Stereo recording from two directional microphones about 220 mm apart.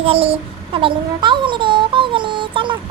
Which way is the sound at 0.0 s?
25° right (ahead or behind).